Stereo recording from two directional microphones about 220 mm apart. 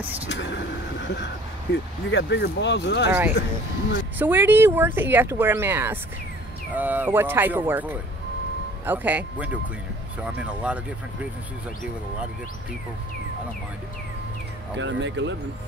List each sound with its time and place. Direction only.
0.3 s vehicle: 55° left (ahead or behind)
1.0 s speech: 50° left (ahead or behind)
3.1 s speech: 10° right (ahead or behind)
14.8 s speech: 55° right (ahead or behind)